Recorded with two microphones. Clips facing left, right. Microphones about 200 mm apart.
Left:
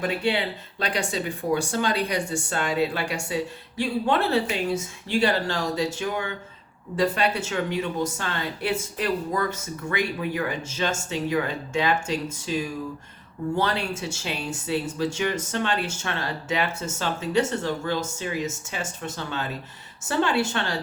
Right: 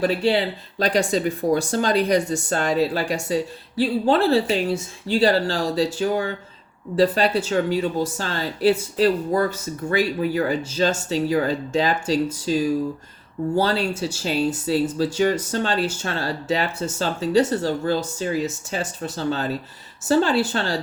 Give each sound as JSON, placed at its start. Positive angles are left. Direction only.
{"t": 0.0, "sound": "speech", "side_deg": -35}